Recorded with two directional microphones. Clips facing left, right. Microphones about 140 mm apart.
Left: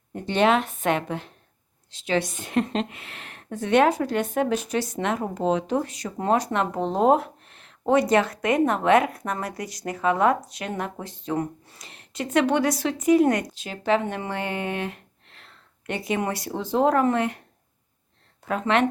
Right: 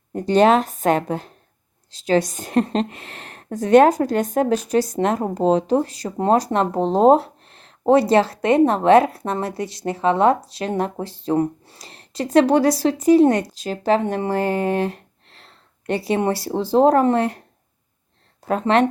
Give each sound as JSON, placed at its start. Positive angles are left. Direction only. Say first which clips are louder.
{"t": 0.1, "sound": "a woman's voice", "louder": "right 6 dB", "side_deg": -40}
{"t": 18.4, "sound": "a woman's voice", "louder": "right 5 dB", "side_deg": -35}